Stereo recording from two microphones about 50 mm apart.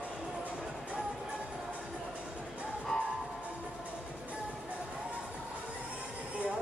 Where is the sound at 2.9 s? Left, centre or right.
Centre.